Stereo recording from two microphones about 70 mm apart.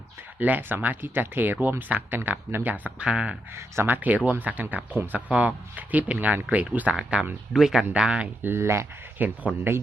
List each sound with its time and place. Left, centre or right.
0.3 s speech: right
3.8 s speech: right
7.5 s speech: centre
8.4 s speech: right
9.1 s speech: right